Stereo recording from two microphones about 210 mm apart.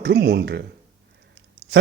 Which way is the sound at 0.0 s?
55° right (ahead or behind).